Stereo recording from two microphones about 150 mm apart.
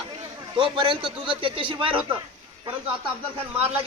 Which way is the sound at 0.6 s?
35° right (ahead or behind).